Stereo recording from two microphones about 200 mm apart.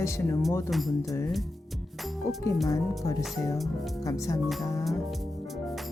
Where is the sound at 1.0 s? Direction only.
15° left (ahead or behind).